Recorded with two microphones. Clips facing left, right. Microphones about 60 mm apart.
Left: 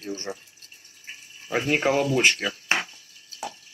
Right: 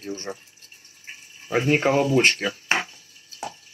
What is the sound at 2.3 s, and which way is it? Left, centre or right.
Speech, right.